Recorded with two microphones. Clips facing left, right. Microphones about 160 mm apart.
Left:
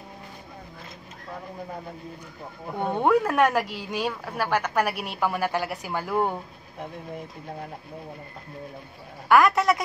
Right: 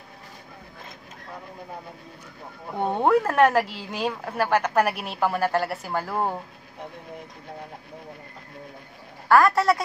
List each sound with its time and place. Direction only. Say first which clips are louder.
3.0 s speech: right 2 dB; 5° right (ahead or behind)
3.7 s speech: even; 10° left (ahead or behind)
4.6 s speech: right 3 dB; 10° right (ahead or behind)
4.9 s a woman's voice: right 2 dB; 5° left (ahead or behind)
9.3 s a woman's voice: right 1 dB; 20° left (ahead or behind)